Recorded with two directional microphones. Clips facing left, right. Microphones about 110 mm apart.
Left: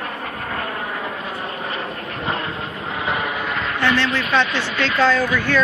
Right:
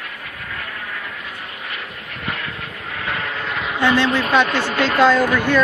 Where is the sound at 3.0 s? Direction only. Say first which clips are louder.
Left 3 dB; 20° left (ahead or behind).